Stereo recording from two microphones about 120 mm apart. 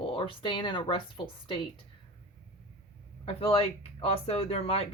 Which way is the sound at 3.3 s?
55° left (ahead or behind).